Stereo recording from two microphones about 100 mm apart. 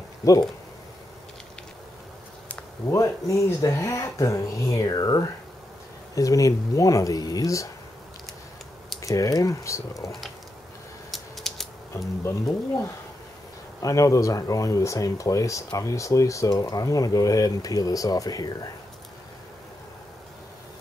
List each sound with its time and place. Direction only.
0.2 s speech: 35° left (ahead or behind)
2.9 s speech: 30° left (ahead or behind)
9.0 s speech: 35° left (ahead or behind)
11.1 s typing: centre (ahead or behind)
11.9 s speech: 30° left (ahead or behind)
13.8 s speech: 35° left (ahead or behind)